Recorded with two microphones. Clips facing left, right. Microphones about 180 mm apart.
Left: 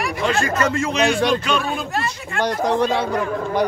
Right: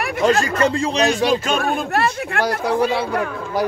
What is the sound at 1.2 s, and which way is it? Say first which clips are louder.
Speech: right 1 dB; 5° right (ahead or behind).